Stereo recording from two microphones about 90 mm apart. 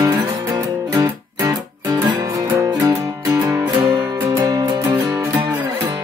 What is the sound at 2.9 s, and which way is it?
Music, 35° right (ahead or behind).